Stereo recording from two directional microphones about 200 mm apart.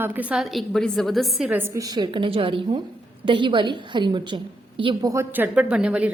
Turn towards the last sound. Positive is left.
turn(degrees=-5)  # may be behind; listen again after turning